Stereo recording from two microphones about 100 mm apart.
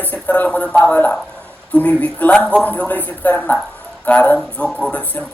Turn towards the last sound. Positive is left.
turn(degrees=15)  # may be behind; listen again after turning